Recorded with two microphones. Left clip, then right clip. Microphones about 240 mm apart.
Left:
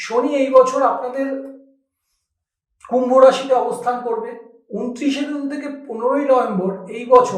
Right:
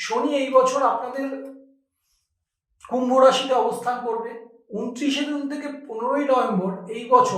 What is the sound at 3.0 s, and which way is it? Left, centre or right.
Speech, right.